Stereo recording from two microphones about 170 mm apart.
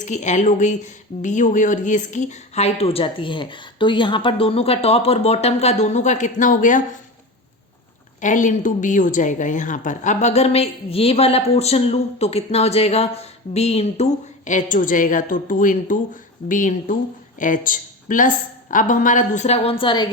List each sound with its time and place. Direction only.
0.0 s a woman's voice: 45° left (ahead or behind)
8.2 s a woman's voice: 50° left (ahead or behind); by 20.1 s 30° left (ahead or behind)